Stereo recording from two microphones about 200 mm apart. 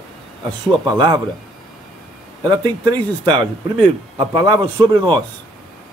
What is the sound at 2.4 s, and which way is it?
Speech, 20° right (ahead or behind).